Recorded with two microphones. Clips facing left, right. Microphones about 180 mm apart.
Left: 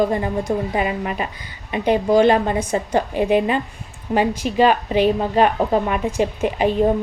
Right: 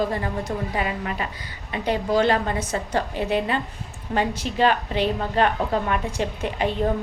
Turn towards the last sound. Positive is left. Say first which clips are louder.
# left 6 dB
turn(degrees=15)  # may be behind; listen again after turning